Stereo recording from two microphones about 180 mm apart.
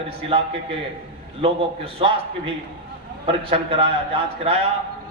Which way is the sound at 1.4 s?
30° right (ahead or behind).